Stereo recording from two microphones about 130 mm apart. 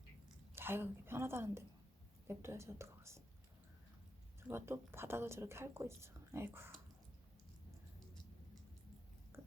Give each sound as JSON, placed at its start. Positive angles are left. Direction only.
{"t": 0.5, "sound": "a woman's voice", "side_deg": -15}
{"t": 4.4, "sound": "a woman's voice", "side_deg": -20}
{"t": 9.3, "sound": "a sound", "side_deg": -20}